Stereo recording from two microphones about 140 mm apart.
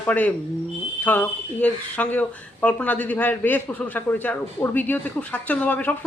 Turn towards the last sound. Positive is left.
turn(degrees=10)  # may be behind; listen again after turning